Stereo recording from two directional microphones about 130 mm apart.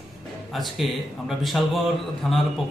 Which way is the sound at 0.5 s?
Centre (ahead or behind).